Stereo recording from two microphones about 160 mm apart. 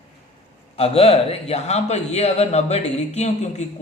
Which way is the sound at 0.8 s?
40° left (ahead or behind).